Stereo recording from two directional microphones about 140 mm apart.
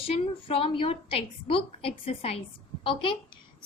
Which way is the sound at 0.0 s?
45° left (ahead or behind).